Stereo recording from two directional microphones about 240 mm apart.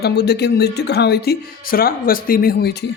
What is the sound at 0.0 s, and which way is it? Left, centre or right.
Speech, left.